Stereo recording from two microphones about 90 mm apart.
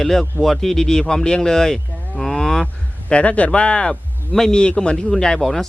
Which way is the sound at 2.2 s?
5° left (ahead or behind).